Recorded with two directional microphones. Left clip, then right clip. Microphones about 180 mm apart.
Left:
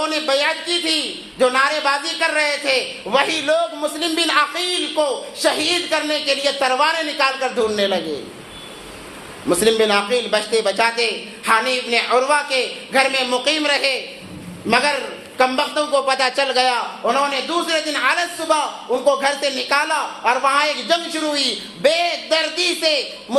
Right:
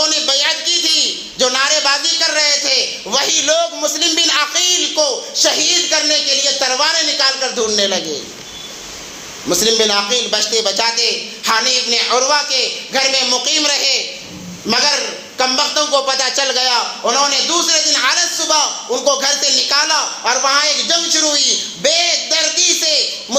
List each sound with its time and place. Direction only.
0.0 s a sound: 15° right (ahead or behind)
1.4 s a man's voice: 20° right (ahead or behind)
9.5 s a man's voice: 10° right (ahead or behind)